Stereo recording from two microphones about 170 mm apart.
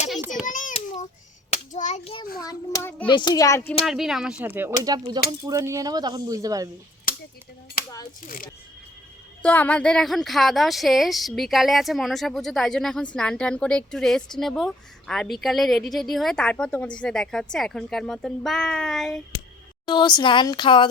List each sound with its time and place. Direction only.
0.4 s a sound: 50° left (ahead or behind)
1.7 s hands: 45° left (ahead or behind)
2.4 s a sound: 20° left (ahead or behind)
3.1 s speech: 25° left (ahead or behind)
3.8 s speech: centre (ahead or behind)
4.8 s a woman's voice: 20° right (ahead or behind)
9.4 s speech: 10° left (ahead or behind)
19.8 s speech: 25° left (ahead or behind)